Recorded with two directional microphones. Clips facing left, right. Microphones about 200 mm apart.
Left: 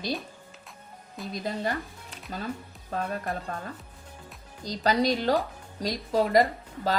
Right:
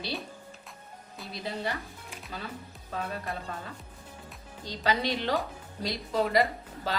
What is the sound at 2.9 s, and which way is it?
Speech, 45° left (ahead or behind).